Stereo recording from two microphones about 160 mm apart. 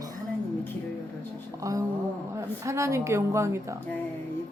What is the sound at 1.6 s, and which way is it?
A woman's voice, 20° right (ahead or behind).